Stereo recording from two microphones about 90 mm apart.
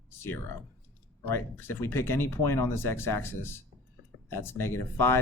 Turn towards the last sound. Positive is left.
turn(degrees=25)  # may be behind; listen again after turning